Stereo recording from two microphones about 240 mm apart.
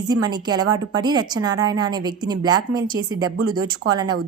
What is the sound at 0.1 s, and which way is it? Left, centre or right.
A woman's voice, centre.